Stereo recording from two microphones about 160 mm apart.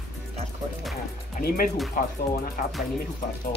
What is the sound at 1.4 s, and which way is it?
Speech, 70° left (ahead or behind).